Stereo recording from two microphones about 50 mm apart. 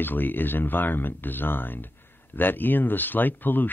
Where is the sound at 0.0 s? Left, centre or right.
Left.